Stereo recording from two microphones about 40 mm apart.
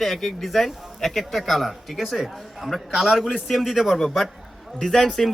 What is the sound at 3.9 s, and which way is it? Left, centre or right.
Speech, centre.